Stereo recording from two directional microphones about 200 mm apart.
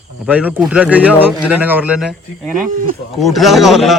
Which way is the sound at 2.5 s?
45° right (ahead or behind).